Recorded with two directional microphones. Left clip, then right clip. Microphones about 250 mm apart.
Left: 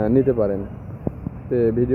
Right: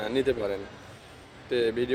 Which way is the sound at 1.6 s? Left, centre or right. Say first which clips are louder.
Left 7 dB; right.